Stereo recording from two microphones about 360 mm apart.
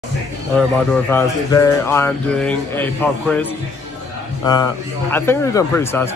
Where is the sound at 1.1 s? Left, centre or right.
Centre.